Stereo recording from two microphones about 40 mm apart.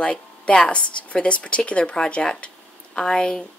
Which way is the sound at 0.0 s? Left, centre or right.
Left.